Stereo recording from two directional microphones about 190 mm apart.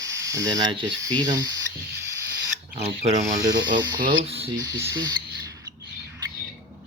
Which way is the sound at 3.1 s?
15° right (ahead or behind).